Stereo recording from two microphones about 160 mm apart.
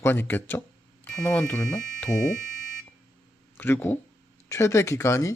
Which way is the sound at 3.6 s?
15° left (ahead or behind).